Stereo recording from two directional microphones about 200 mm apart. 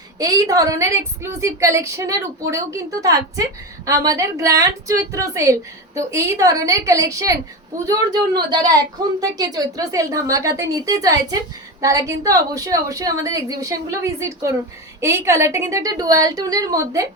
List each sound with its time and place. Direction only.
0.2 s a woman's voice: 20° right (ahead or behind)